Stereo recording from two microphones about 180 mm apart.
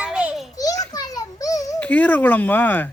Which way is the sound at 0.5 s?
20° left (ahead or behind).